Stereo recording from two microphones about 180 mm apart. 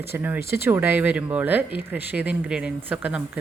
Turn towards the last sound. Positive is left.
turn(degrees=-10)  # may be behind; listen again after turning